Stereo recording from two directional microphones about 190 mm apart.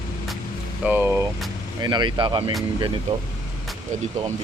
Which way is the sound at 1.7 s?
20° right (ahead or behind).